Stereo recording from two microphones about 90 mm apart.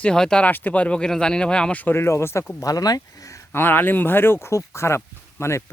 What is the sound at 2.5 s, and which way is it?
Speech, 40° left (ahead or behind).